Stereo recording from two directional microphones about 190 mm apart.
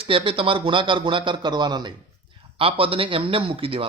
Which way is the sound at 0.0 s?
30° right (ahead or behind).